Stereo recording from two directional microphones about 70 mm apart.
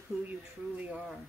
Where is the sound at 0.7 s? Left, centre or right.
Right.